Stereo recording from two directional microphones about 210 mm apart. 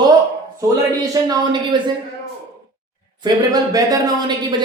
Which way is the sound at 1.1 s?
20° right (ahead or behind).